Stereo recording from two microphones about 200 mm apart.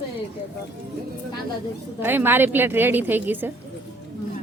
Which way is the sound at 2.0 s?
10° right (ahead or behind).